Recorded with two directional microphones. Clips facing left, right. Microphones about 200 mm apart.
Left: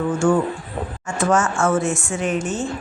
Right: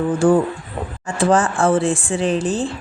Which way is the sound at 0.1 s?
35° right (ahead or behind).